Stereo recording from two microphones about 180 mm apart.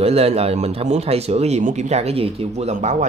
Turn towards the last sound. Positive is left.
turn(degrees=-40)  # may be behind; listen again after turning